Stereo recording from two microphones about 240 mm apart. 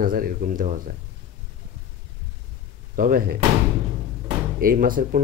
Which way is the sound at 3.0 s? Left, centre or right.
Right.